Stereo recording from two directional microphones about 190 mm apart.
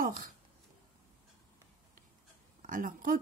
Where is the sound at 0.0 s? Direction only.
50° right (ahead or behind).